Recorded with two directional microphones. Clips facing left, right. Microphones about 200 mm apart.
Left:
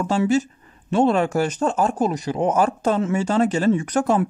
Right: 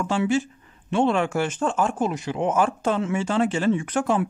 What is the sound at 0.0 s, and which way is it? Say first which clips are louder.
Speech: left 3 dB; 40° left (ahead or behind).